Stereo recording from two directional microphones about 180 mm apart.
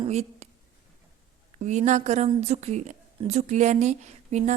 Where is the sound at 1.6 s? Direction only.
40° right (ahead or behind).